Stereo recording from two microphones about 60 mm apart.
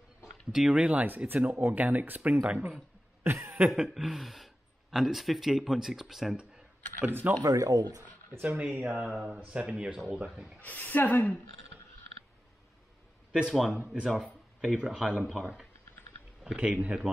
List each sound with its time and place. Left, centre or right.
0.5 s speech: centre
3.3 s cough: right
3.7 s speech: centre
7.0 s speech: right
7.4 s speech: right
8.4 s speech: right
8.7 s speech: centre
10.6 s a woman's voice: left
13.3 s speech: centre
16.5 s speech: right